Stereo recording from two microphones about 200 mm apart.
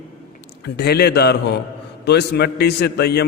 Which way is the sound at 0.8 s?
55° left (ahead or behind).